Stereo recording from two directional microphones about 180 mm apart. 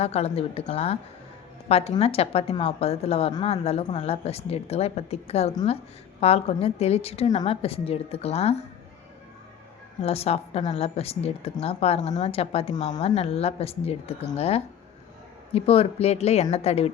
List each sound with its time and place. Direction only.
0.0 s a woman's voice: 35° left (ahead or behind)
10.0 s a woman's voice: 35° left (ahead or behind)